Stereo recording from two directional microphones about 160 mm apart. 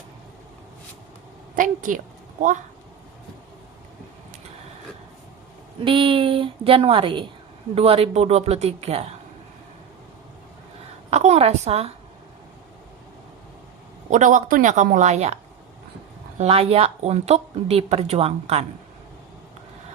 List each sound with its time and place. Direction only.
1.5 s a woman's voice: 55° right (ahead or behind)
5.8 s speech: 35° right (ahead or behind)
11.1 s speech: 45° right (ahead or behind)
14.1 s speech: 55° right (ahead or behind)
16.4 s speech: 40° right (ahead or behind)